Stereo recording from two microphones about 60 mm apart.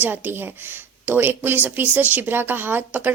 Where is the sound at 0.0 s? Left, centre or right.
Right.